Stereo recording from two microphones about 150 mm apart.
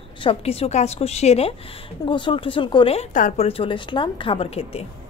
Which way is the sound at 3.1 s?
60° left (ahead or behind).